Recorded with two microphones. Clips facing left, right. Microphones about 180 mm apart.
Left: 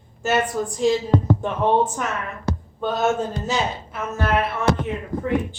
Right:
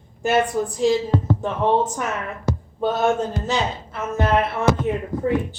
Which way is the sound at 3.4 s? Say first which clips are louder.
Right 1 dB; centre (ahead or behind).